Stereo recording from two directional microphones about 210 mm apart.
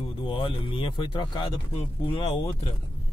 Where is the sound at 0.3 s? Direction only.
25° left (ahead or behind).